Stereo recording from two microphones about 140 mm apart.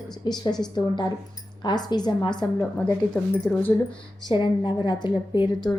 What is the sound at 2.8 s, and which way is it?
Speech, 5° left (ahead or behind).